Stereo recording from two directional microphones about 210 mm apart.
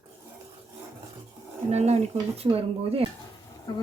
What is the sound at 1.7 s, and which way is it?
Speech, 30° right (ahead or behind).